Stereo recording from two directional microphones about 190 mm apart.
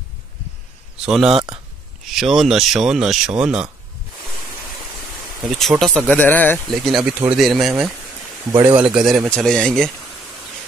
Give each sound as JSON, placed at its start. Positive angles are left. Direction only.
{"t": 1.0, "sound": "speech", "side_deg": 0}
{"t": 1.3, "sound": "speech", "side_deg": -20}
{"t": 2.0, "sound": "speech", "side_deg": 0}
{"t": 5.6, "sound": "speech", "side_deg": 0}
{"t": 8.5, "sound": "speech", "side_deg": -20}
{"t": 8.9, "sound": "speech", "side_deg": -5}